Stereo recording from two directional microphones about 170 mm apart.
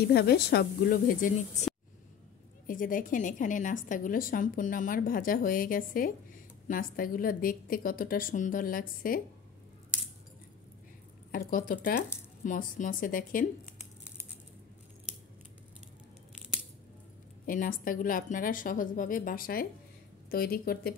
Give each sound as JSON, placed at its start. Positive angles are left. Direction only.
{"t": 0.1, "sound": "a woman's voice", "side_deg": 70}
{"t": 11.3, "sound": "a woman's voice", "side_deg": 55}
{"t": 17.5, "sound": "a woman's voice", "side_deg": 55}